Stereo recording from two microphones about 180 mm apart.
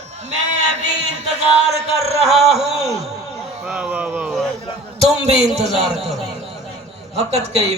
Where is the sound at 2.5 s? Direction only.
Centre (ahead or behind).